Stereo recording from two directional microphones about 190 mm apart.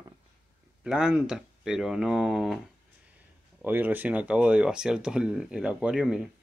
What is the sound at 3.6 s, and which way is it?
Speech, 10° right (ahead or behind).